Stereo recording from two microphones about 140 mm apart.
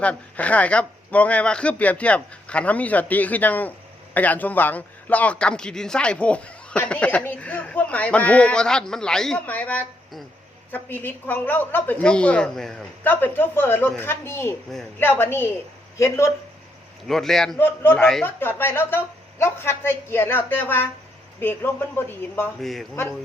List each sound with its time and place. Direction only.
0.0 s speech: 10° left (ahead or behind)
17.1 s a man's voice: centre (ahead or behind)
17.6 s speech: 15° left (ahead or behind)
18.0 s a man's voice: 5° left (ahead or behind)
18.3 s speech: 15° left (ahead or behind)
22.6 s a man's voice: centre (ahead or behind)